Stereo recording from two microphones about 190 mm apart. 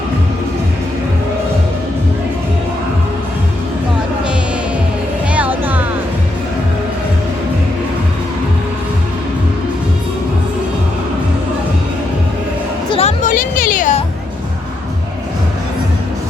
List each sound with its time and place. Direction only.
5.3 s music: 10° right (ahead or behind)
12.9 s music: 35° left (ahead or behind)